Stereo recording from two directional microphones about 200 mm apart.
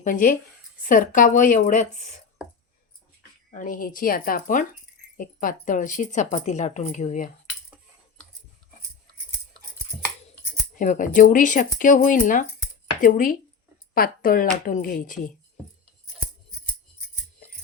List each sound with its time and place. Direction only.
0.0 s a woman's voice: 45° left (ahead or behind)
2.4 s a sound: 5° right (ahead or behind)
3.5 s a woman's voice: 40° left (ahead or behind)
10.8 s a woman's voice: 40° left (ahead or behind)